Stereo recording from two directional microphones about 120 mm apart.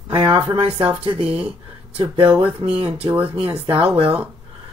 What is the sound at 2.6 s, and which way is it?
Speech, 55° right (ahead or behind).